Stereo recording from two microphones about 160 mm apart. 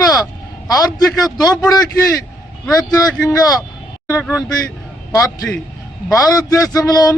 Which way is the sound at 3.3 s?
20° left (ahead or behind).